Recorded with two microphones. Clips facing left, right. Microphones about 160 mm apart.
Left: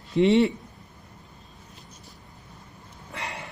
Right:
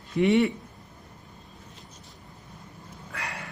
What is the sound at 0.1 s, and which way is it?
Speech, 25° left (ahead or behind).